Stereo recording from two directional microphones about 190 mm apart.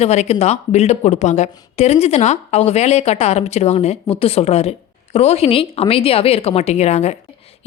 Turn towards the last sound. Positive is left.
turn(degrees=35)  # may be behind; listen again after turning